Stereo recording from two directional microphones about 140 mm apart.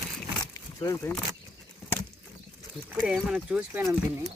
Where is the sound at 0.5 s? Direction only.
25° left (ahead or behind).